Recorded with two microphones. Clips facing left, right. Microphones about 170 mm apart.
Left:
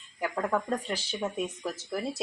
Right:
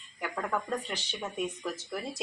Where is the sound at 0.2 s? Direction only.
25° left (ahead or behind).